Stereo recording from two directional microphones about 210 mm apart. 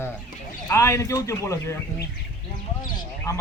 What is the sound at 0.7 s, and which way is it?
Speech, 15° left (ahead or behind).